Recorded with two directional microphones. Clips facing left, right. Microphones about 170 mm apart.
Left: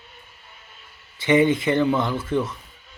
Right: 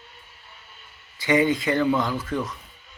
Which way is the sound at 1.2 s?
25° left (ahead or behind).